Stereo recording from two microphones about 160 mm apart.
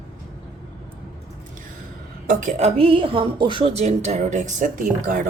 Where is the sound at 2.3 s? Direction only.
50° right (ahead or behind).